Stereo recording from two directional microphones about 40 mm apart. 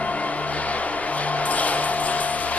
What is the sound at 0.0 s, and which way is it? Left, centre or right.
Music, left.